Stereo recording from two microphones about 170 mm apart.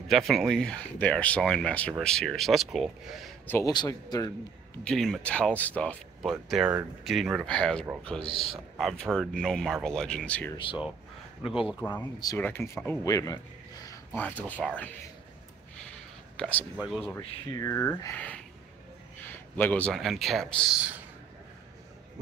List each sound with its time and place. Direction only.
0.1 s speech: centre (ahead or behind)
3.4 s speech: 15° left (ahead or behind)
3.7 s speech: 25° left (ahead or behind)
4.8 s speech: 5° left (ahead or behind)
6.5 s speech: 5° right (ahead or behind)
11.4 s speech: 5° right (ahead or behind)
11.9 s speech: 20° left (ahead or behind)
13.8 s a sound: 10° left (ahead or behind)
14.6 s speech: centre (ahead or behind)
16.3 s speech: 10° left (ahead or behind)
16.7 s speech: 5° right (ahead or behind)
17.6 s speech: 15° left (ahead or behind)
19.5 s speech: 10° left (ahead or behind)
20.7 s speech: 5° right (ahead or behind)